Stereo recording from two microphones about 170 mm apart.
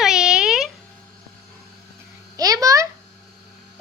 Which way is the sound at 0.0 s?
5° right (ahead or behind).